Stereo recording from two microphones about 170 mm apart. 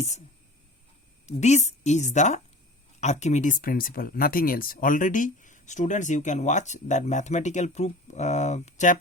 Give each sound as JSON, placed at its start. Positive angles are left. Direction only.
{"t": 1.3, "sound": "speech", "side_deg": 40}